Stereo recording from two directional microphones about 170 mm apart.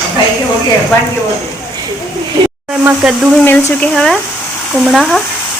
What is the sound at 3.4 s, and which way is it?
Speech, 10° left (ahead or behind).